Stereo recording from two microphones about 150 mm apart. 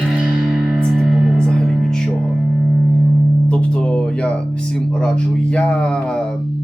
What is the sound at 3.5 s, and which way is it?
Speech, 5° left (ahead or behind).